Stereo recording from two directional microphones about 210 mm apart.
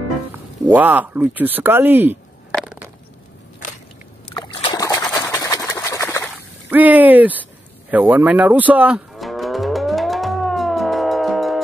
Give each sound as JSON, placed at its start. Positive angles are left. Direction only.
{"t": 0.3, "sound": "speech", "side_deg": -10}
{"t": 2.5, "sound": "crushing", "side_deg": -5}
{"t": 4.3, "sound": "boat", "side_deg": 25}
{"t": 5.1, "sound": "a sound", "side_deg": 15}
{"t": 6.2, "sound": "whip", "side_deg": -5}
{"t": 7.9, "sound": "moo", "side_deg": -10}